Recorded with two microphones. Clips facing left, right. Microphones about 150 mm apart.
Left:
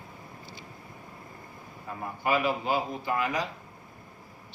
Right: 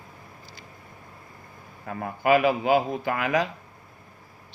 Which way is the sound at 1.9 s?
75° right (ahead or behind).